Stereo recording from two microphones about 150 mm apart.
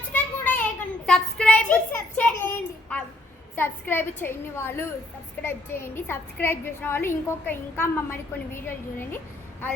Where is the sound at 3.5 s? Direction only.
15° left (ahead or behind).